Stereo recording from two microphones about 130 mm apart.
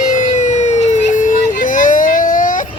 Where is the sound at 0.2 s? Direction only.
70° left (ahead or behind).